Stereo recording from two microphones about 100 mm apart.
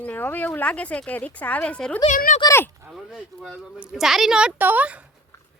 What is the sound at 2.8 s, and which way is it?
A woman's voice, 5° right (ahead or behind).